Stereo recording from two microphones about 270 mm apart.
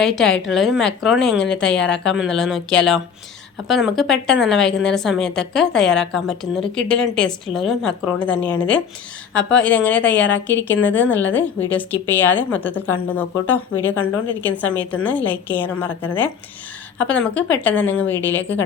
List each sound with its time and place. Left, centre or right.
0.0 s a woman's voice: centre
10.2 s speech: left
10.9 s a woman's voice: centre